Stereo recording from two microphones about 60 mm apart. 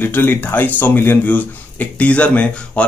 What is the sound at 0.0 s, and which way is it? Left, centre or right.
Speech, left.